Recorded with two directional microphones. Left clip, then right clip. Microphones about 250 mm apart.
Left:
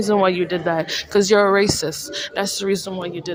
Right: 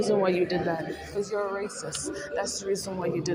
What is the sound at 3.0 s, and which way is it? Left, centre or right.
Speech, left.